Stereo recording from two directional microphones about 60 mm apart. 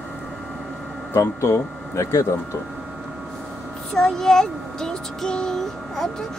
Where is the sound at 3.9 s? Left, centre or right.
Centre.